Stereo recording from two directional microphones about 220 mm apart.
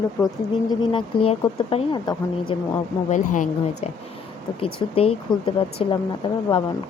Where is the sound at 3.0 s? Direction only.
35° left (ahead or behind).